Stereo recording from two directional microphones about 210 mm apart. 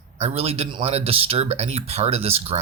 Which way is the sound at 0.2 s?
30° right (ahead or behind).